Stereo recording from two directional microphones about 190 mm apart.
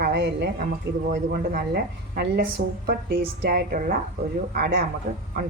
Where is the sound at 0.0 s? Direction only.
65° right (ahead or behind).